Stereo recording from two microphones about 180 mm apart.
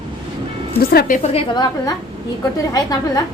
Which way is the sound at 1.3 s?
25° left (ahead or behind).